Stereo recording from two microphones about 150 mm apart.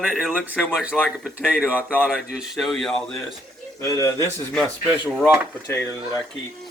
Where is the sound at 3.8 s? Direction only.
20° left (ahead or behind).